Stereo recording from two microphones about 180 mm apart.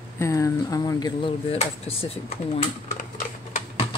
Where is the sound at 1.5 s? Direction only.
35° left (ahead or behind).